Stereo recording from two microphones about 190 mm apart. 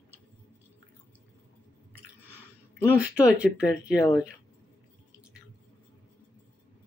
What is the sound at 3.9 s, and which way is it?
Speech, 15° left (ahead or behind).